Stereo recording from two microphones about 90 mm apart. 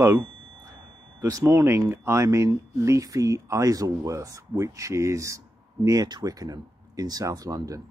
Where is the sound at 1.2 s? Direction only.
40° right (ahead or behind).